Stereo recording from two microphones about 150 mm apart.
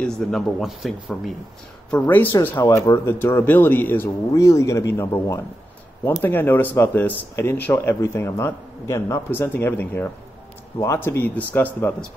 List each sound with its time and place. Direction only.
0.0 s speech: centre (ahead or behind)
1.9 s speech: 10° left (ahead or behind)